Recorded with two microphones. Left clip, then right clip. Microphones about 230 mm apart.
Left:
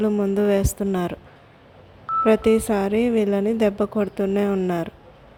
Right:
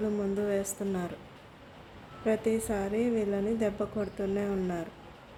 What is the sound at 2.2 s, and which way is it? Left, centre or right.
Speech, left.